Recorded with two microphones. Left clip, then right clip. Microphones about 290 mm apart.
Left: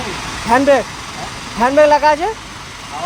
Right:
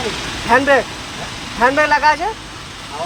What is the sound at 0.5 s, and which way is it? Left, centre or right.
Speech, left.